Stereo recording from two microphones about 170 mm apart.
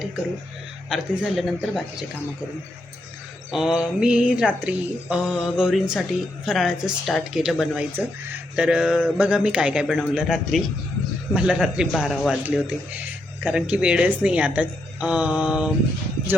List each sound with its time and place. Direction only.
0.9 s a woman's voice: centre (ahead or behind)
3.5 s a woman's voice: 5° right (ahead or behind)